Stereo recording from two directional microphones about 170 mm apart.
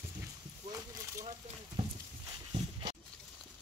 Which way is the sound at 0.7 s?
20° right (ahead or behind).